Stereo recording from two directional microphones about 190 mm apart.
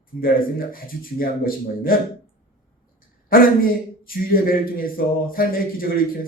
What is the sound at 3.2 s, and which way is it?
A man's voice, 50° left (ahead or behind).